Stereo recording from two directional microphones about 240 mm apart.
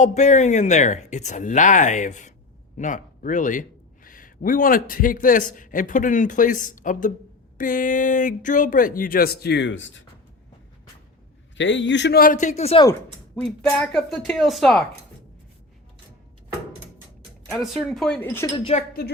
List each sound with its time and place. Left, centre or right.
0.0 s speech: left
11.5 s speech: left
12.9 s speech: centre
17.6 s speech: centre; by 18.9 s left